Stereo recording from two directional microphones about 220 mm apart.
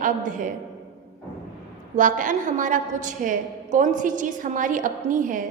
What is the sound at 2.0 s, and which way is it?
A woman's voice, 35° right (ahead or behind).